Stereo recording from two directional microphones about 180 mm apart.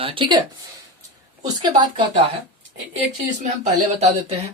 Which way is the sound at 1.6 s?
25° right (ahead or behind).